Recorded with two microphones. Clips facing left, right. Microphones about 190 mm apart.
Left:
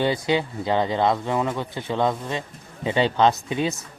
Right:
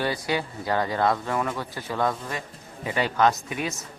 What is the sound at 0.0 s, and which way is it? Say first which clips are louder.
Speech: left 5 dB; 20° left (ahead or behind).